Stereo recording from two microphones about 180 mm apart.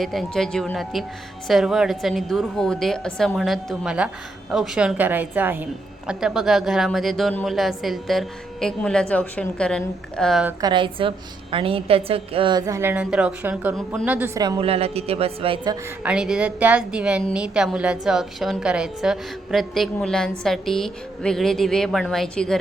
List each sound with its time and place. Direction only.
0.0 s a woman's voice: centre (ahead or behind)
10.6 s a woman's voice: 25° right (ahead or behind); by 14.4 s 10° right (ahead or behind)
14.6 s a woman's voice: 35° right (ahead or behind)
16.0 s speech: 5° right (ahead or behind)